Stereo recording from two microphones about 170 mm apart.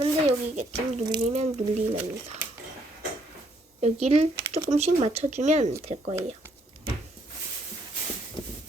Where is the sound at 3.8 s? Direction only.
40° right (ahead or behind).